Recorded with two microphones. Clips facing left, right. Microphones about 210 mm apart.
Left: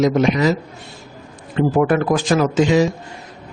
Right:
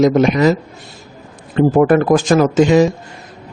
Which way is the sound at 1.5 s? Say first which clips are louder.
Right 5 dB; 45° right (ahead or behind).